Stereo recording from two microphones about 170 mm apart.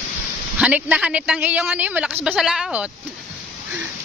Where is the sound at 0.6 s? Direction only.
10° right (ahead or behind).